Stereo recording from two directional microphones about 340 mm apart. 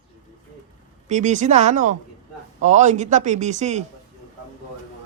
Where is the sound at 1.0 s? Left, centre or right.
Right.